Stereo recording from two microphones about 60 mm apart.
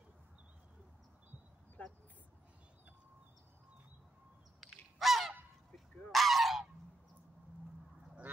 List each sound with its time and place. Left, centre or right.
1.8 s a sound: left
4.6 s bird: centre
6.1 s goose: centre